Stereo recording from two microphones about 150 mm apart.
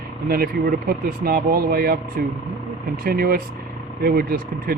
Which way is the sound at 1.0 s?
75° right (ahead or behind).